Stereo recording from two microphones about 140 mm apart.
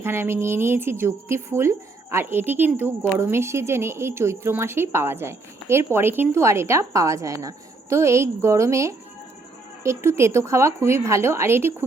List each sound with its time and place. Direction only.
0.0 s a woman's voice: 15° right (ahead or behind)